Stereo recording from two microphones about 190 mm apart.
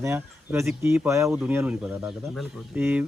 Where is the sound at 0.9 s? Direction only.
15° right (ahead or behind).